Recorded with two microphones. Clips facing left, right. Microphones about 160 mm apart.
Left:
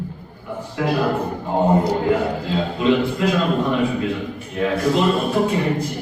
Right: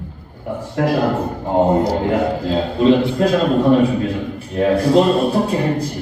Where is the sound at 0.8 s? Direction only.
50° right (ahead or behind).